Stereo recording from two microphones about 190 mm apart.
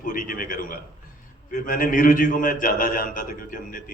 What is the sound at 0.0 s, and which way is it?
A man's voice, 45° left (ahead or behind).